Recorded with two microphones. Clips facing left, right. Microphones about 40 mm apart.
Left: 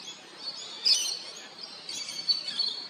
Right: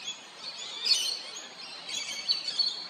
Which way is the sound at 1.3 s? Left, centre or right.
Right.